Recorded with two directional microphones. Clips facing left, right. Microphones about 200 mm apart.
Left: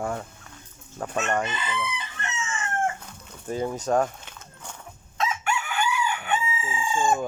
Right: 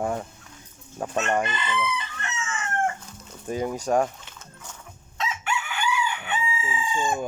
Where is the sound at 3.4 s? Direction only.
15° right (ahead or behind).